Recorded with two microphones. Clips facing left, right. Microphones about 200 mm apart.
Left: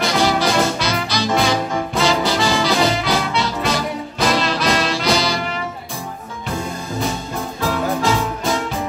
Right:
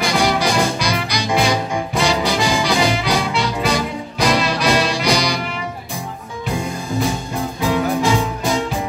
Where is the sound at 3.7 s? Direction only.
15° right (ahead or behind).